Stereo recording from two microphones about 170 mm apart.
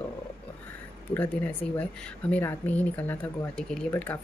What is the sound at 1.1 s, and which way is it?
Speech, 10° left (ahead or behind).